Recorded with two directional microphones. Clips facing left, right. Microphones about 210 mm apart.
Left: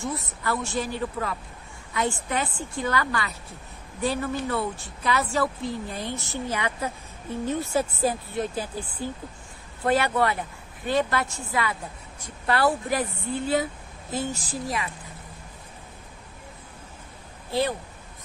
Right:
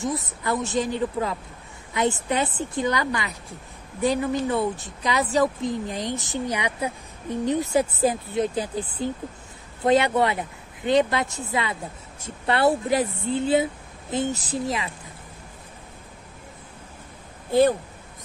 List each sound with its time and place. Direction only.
0.4 s a woman's voice: 20° right (ahead or behind)
17.5 s speech: 50° right (ahead or behind)